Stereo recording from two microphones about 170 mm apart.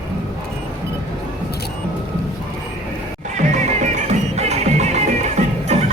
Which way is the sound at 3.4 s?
45° right (ahead or behind).